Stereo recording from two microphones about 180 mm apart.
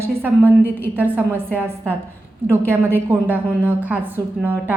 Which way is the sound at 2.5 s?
10° right (ahead or behind).